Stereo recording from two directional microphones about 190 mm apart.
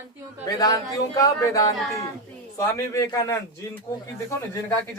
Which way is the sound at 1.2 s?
15° left (ahead or behind).